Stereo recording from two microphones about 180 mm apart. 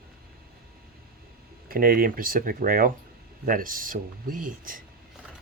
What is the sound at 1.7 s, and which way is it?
Speech, 55° right (ahead or behind).